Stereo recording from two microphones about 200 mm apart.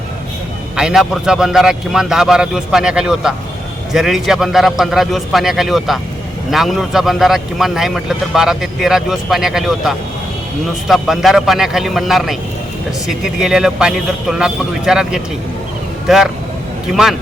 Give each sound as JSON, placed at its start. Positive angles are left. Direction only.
{"t": 0.8, "sound": "a man's voice", "side_deg": -5}